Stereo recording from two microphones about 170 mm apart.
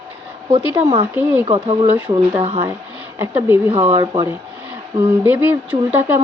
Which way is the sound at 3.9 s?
25° right (ahead or behind).